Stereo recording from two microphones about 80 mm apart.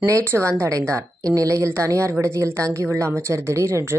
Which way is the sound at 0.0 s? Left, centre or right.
Right.